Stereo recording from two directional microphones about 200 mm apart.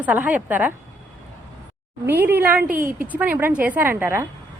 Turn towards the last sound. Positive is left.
turn(degrees=-10)  # may be behind; listen again after turning